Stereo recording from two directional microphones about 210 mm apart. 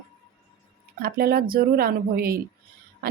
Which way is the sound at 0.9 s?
45° right (ahead or behind).